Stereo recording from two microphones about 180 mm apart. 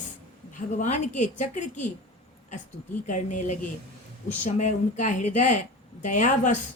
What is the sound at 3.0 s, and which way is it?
Speech, 45° left (ahead or behind).